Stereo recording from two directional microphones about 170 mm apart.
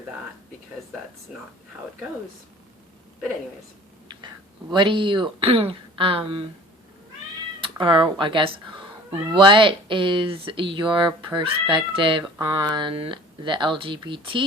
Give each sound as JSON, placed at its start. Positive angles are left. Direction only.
{"t": 4.7, "sound": "speech", "side_deg": -30}
{"t": 7.6, "sound": "speech", "side_deg": -30}